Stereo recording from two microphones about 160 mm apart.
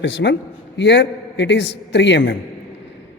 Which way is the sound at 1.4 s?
90° left.